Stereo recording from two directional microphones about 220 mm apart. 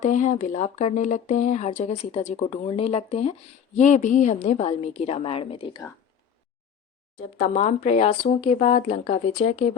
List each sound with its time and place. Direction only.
0.0 s speech: 35° left (ahead or behind)
7.3 s speech: 30° left (ahead or behind)